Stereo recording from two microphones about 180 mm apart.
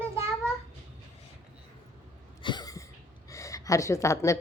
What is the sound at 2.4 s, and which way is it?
Cough, 25° left (ahead or behind).